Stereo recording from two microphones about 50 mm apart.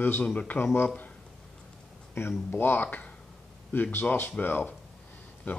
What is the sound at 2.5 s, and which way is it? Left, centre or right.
Speech, left.